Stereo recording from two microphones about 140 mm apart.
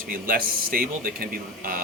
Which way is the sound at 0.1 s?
90° right.